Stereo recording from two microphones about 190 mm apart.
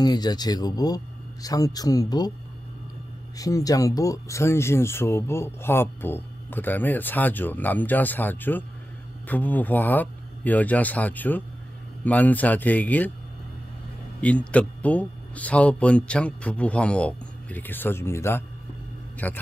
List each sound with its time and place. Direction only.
0.0 s speech: 20° left (ahead or behind)
3.3 s speech: 20° left (ahead or behind)
14.2 s speech: 5° left (ahead or behind)